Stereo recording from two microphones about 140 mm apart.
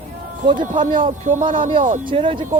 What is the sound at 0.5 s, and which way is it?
Speech, 65° right (ahead or behind).